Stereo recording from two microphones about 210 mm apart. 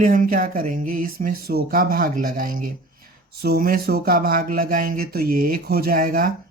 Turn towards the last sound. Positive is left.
turn(degrees=-40)  # may be behind; listen again after turning